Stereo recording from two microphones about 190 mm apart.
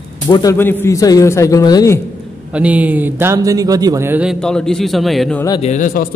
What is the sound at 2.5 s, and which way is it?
A man's voice, 5° right (ahead or behind).